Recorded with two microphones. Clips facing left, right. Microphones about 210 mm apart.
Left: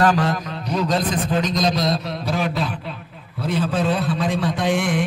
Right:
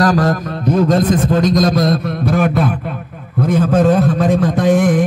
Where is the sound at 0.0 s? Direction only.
40° right (ahead or behind).